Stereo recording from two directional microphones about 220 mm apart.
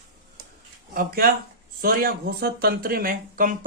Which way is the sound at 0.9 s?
40° right (ahead or behind).